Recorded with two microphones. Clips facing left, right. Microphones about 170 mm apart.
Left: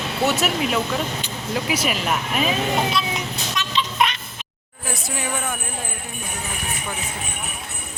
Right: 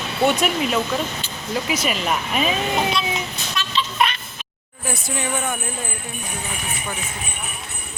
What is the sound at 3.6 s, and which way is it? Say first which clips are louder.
Vehicle: even; 20° left (ahead or behind).